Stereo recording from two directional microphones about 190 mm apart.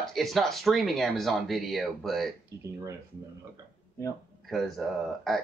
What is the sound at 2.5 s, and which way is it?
Speech, 15° right (ahead or behind).